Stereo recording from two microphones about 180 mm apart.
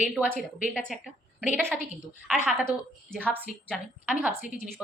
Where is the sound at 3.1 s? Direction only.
5° left (ahead or behind).